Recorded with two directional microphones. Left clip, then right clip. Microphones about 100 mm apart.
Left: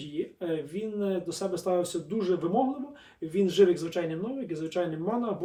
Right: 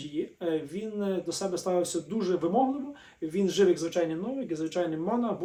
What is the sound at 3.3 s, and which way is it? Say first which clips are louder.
A man's voice: left 2 dB; 30° right (ahead or behind).